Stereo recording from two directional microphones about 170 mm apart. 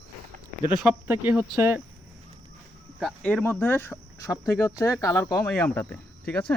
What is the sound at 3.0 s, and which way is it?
Speech, 5° left (ahead or behind).